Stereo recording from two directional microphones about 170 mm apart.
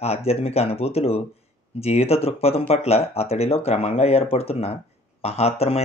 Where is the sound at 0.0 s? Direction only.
35° left (ahead or behind).